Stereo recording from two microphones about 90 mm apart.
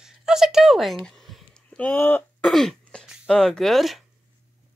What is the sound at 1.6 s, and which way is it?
Speech, 15° left (ahead or behind).